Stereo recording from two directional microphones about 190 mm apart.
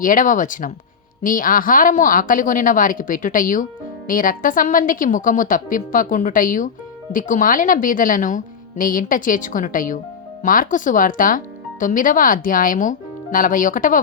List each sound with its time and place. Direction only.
0.0 s a woman's voice: 45° left (ahead or behind)